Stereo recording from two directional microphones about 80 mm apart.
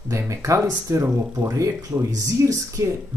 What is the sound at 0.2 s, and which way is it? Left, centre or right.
Speech, right.